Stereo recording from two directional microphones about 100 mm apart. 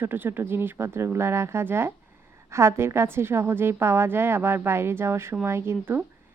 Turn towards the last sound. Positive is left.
turn(degrees=-25)  # may be behind; listen again after turning